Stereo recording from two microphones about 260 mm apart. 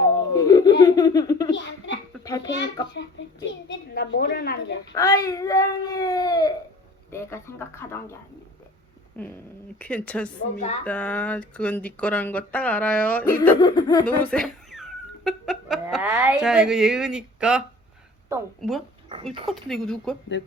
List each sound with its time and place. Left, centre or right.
0.3 s a child's voice: centre
2.9 s a child's voice: left
4.9 s speech: centre
9.1 s speech: centre
20.3 s a child's voice: left